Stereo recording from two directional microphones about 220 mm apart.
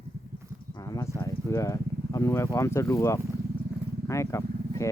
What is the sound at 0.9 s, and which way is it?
Speech, 15° left (ahead or behind).